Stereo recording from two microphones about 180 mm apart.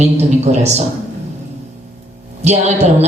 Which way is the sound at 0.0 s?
40° right (ahead or behind).